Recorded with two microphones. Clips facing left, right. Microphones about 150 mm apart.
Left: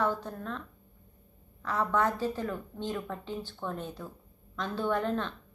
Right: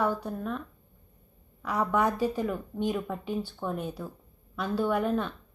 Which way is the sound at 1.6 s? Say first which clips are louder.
Right 2 dB; 10° right (ahead or behind).